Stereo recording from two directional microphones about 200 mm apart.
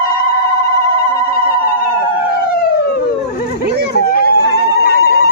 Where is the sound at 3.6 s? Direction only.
55° right (ahead or behind).